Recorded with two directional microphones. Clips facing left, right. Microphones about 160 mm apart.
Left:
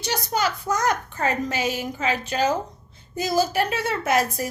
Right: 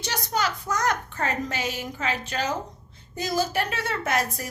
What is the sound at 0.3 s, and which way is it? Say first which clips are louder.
A woman's voice: left 2 dB; 5° left (ahead or behind).